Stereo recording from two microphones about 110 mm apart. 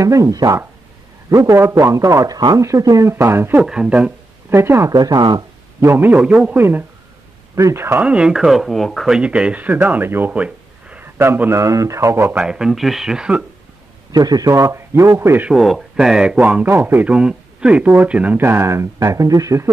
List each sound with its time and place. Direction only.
0.0 s speech: 30° right (ahead or behind)
3.6 s speech: 5° right (ahead or behind)
4.5 s speech: 25° right (ahead or behind)
4.9 s speech: 40° right (ahead or behind)
5.8 s speech: 20° right (ahead or behind)
6.1 s speech: 5° right (ahead or behind)
6.5 s speech: 20° right (ahead or behind)
8.0 s speech: 10° right (ahead or behind); by 12.4 s 25° right (ahead or behind)
12.4 s speech: 5° right (ahead or behind)
14.1 s speech: 35° right (ahead or behind)
15.5 s speech: centre (ahead or behind)
16.6 s speech: 20° right (ahead or behind)